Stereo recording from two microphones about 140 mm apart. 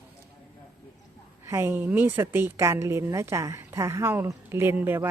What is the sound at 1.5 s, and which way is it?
A woman's voice, 20° right (ahead or behind).